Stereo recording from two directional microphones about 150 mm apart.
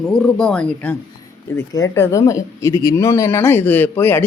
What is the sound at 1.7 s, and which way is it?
Speech, 20° left (ahead or behind).